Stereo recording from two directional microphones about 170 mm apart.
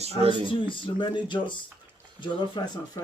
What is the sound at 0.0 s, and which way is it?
Speech, 35° right (ahead or behind).